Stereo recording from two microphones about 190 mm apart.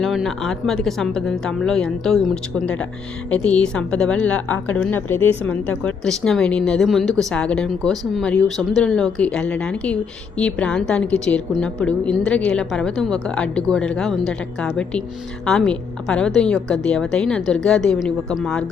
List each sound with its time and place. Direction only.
0.0 s speech: centre (ahead or behind)